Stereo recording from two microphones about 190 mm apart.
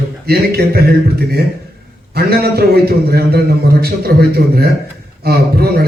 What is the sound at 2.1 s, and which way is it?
Speech, 55° right (ahead or behind).